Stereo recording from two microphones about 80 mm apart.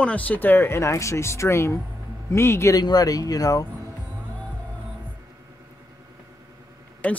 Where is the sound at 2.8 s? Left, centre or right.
Left.